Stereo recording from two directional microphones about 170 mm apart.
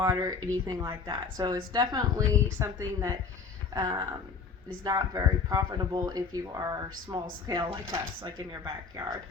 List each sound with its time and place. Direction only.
0.0 s speech: 20° right (ahead or behind)